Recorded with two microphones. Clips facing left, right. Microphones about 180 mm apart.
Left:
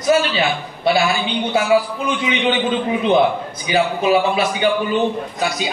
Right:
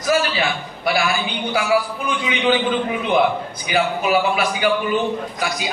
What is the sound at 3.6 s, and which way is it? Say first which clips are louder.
A man's voice: left 3 dB; 25° left (ahead or behind).